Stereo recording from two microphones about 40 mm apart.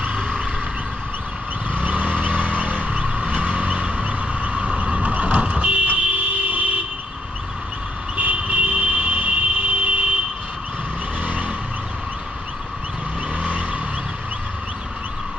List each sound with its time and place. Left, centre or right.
1.8 s vehicle: right
2.5 s music: right
3.8 s vehicle: right
8.1 s a sound: right
11.2 s vehicle: right
13.4 s vehicle: right